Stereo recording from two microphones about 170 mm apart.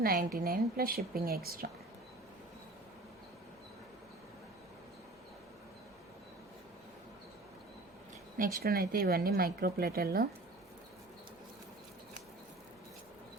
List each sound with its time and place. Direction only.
0.0 s speech: 60° right (ahead or behind)
8.6 s speech: 65° right (ahead or behind)